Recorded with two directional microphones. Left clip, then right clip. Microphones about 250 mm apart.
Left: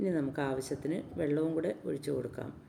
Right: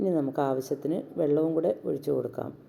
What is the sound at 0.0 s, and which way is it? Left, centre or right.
Speech, centre.